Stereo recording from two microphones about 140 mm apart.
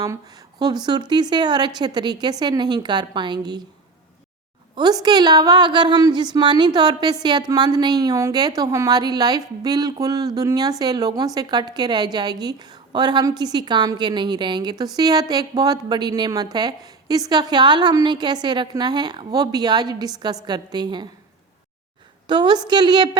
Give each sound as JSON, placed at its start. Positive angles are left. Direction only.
{"t": 0.0, "sound": "a woman's voice", "side_deg": -25}
{"t": 4.7, "sound": "a woman's voice", "side_deg": -30}
{"t": 22.3, "sound": "a woman's voice", "side_deg": -35}